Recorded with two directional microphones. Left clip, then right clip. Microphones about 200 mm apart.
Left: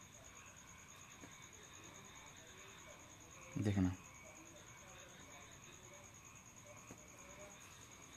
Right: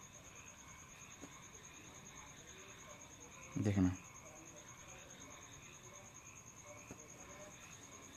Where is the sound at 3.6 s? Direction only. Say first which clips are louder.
Right 3 dB; 5° right (ahead or behind).